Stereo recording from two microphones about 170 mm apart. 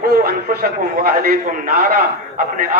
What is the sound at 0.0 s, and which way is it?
A man's voice, 60° right (ahead or behind).